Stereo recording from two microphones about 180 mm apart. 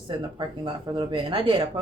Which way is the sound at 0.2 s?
25° right (ahead or behind).